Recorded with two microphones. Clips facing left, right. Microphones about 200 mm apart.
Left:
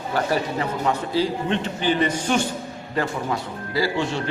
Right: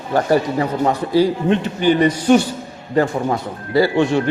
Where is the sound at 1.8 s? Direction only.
50° right (ahead or behind).